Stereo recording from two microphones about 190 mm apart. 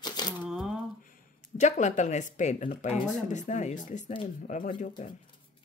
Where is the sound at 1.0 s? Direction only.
45° left (ahead or behind).